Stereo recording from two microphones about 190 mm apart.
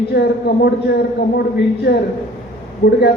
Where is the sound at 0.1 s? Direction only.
60° left (ahead or behind).